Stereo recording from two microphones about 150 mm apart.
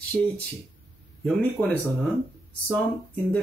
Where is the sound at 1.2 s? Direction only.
10° left (ahead or behind).